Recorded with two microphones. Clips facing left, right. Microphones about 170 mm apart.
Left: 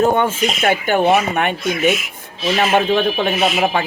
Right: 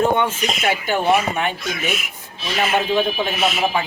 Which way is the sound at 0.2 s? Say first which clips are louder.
Left 4 dB; 55° left (ahead or behind).